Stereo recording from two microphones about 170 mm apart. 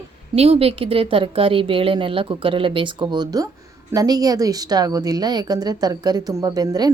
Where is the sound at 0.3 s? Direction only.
35° right (ahead or behind).